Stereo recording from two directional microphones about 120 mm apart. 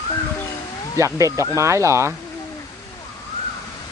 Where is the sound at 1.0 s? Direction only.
25° right (ahead or behind).